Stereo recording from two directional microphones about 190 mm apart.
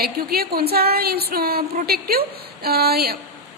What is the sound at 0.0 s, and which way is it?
A woman's voice, 55° right (ahead or behind).